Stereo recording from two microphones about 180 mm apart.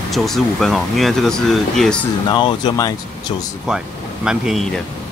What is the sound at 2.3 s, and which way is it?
Speech, 25° left (ahead or behind).